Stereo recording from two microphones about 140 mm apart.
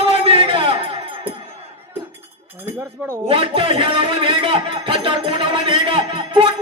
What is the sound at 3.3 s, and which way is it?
Music, 40° right (ahead or behind).